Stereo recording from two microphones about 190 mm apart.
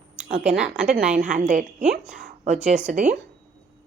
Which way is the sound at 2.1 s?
40° right (ahead or behind).